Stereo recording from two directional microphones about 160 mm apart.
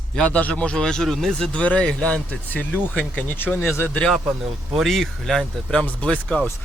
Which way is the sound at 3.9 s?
5° left (ahead or behind).